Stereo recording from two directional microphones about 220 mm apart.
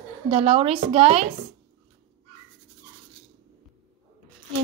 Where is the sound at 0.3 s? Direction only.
25° right (ahead or behind).